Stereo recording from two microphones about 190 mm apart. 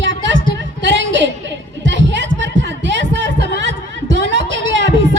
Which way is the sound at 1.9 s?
70° right (ahead or behind).